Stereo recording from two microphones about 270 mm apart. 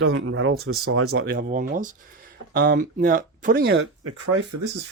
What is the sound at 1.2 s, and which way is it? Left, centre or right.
Speech, right.